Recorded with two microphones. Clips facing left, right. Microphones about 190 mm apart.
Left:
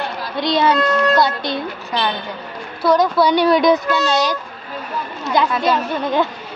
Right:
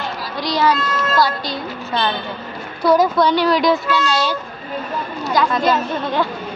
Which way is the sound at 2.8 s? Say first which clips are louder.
Right 1 dB; 5° right (ahead or behind).